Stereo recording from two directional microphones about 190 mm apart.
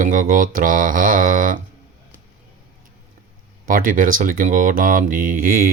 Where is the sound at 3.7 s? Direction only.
45° right (ahead or behind).